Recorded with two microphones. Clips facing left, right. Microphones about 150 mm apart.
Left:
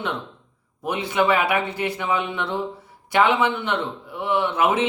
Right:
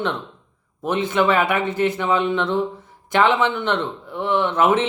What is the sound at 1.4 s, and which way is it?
Speech, 10° left (ahead or behind).